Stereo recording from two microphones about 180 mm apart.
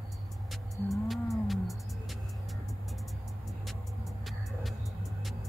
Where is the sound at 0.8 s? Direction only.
Centre (ahead or behind).